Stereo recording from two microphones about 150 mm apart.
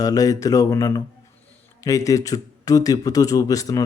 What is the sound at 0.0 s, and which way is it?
Speech, 25° left (ahead or behind).